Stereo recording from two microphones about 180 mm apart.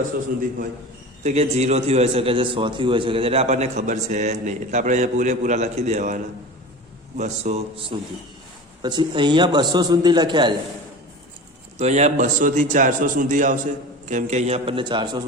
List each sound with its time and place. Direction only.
1.2 s a man's voice: 40° right (ahead or behind)
11.8 s a man's voice: 40° right (ahead or behind)